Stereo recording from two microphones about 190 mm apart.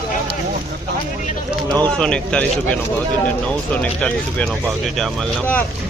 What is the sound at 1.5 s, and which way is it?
Speech, 5° left (ahead or behind).